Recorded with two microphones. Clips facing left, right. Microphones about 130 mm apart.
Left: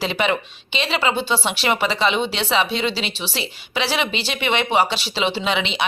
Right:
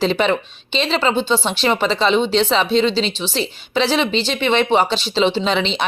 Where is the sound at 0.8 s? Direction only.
5° left (ahead or behind).